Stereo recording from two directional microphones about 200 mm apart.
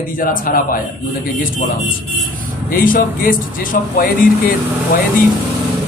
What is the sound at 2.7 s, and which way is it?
Speech, 45° left (ahead or behind).